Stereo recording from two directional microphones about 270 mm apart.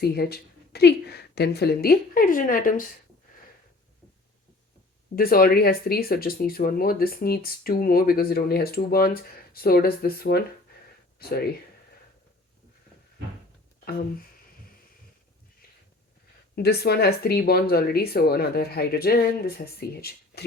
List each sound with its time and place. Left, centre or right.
0.0 s speech: left
5.1 s speech: left
16.6 s speech: left